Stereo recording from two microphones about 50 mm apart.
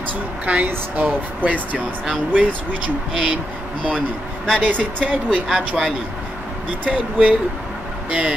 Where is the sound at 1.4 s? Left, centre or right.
Right.